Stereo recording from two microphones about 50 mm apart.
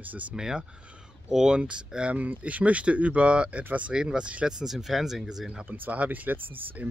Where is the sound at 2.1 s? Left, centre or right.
Right; by 5.6 s centre.